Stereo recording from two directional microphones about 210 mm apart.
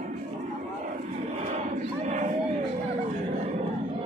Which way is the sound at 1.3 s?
30° right (ahead or behind).